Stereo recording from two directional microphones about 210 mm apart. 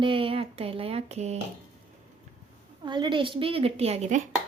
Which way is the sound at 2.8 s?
20° right (ahead or behind).